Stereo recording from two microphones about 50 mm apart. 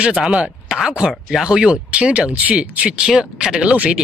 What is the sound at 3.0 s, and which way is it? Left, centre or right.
Speech, centre.